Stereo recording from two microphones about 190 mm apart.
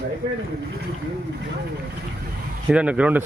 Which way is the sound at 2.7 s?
5° right (ahead or behind).